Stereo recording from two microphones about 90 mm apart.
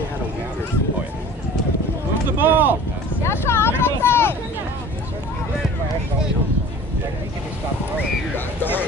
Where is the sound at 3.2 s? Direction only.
30° left (ahead or behind).